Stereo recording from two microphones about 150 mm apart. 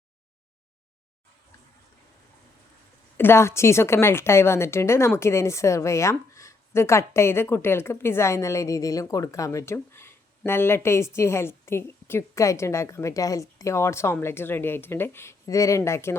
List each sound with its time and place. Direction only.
3.2 s a woman's voice: 15° left (ahead or behind)